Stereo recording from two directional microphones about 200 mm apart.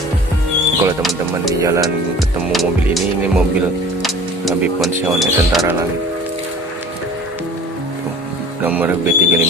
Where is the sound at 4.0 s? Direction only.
Centre (ahead or behind).